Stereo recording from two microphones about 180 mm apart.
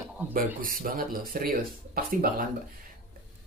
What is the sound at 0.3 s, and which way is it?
Speech, 50° right (ahead or behind).